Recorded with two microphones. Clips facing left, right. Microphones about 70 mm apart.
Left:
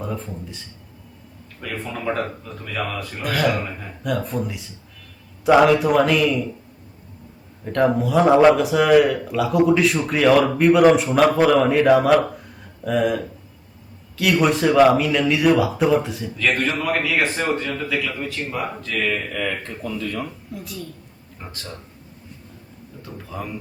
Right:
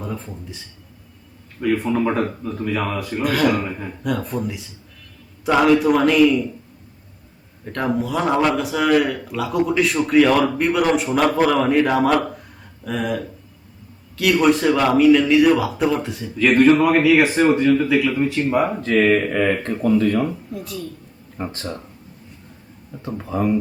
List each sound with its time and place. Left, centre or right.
0.0 s a sound: centre
1.9 s a man's voice: centre
3.2 s speech: centre
7.6 s speech: centre
16.4 s a man's voice: centre
18.5 s speech: right
19.1 s a man's voice: right
20.5 s speech: centre
21.4 s a man's voice: right
23.0 s speech: right